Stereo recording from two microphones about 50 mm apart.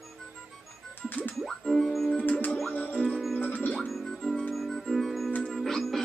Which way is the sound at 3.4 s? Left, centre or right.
Left.